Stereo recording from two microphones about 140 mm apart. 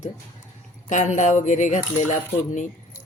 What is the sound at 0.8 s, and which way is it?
Speech, 60° left (ahead or behind).